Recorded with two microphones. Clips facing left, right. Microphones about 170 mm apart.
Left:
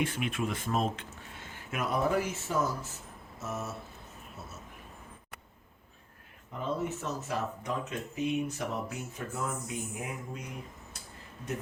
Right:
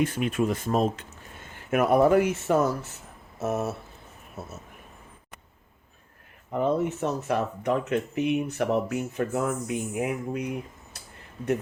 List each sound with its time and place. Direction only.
0.0 s speech: 40° right (ahead or behind); by 3.8 s 65° right (ahead or behind)
6.5 s speech: 60° right (ahead or behind)